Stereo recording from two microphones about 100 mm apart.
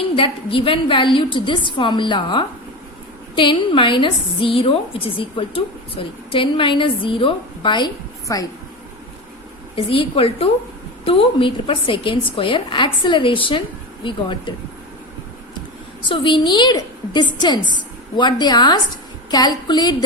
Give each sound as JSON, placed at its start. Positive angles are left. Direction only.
{"t": 0.2, "sound": "a woman's voice", "side_deg": 65}
{"t": 9.7, "sound": "a woman's voice", "side_deg": 65}
{"t": 16.0, "sound": "a woman's voice", "side_deg": 55}